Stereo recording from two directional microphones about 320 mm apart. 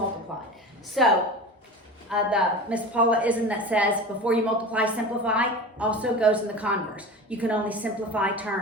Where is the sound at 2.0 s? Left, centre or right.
Centre.